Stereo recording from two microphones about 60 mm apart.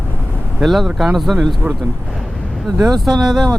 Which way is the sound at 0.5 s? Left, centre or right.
Centre.